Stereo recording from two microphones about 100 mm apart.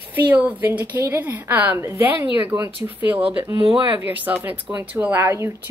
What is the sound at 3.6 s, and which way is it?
Speech, 65° right (ahead or behind).